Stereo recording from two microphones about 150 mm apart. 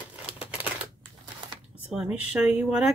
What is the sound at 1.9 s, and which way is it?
Speech, 5° right (ahead or behind).